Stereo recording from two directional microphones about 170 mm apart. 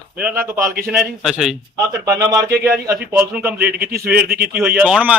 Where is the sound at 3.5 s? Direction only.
60° right (ahead or behind).